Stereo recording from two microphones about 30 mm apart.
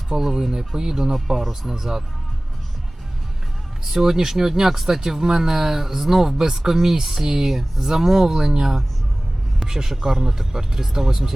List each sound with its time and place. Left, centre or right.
0.2 s speech: centre
0.8 s speech: right
1.1 s speech: centre
3.9 s speech: centre
8.4 s speech: centre
9.6 s speech: centre